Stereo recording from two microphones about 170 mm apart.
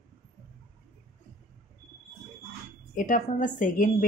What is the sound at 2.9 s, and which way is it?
Speech, 50° left (ahead or behind).